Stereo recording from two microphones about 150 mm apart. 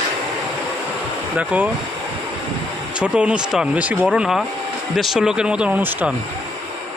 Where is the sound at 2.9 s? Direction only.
5° right (ahead or behind).